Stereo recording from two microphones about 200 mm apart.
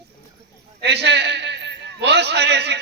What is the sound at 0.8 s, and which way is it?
A man's voice, 55° right (ahead or behind).